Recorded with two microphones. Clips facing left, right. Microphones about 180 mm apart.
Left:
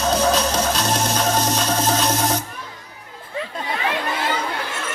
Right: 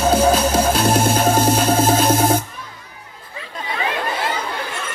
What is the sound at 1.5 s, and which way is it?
Music, 50° right (ahead or behind).